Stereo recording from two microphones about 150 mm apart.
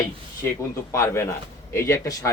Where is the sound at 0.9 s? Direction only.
20° left (ahead or behind).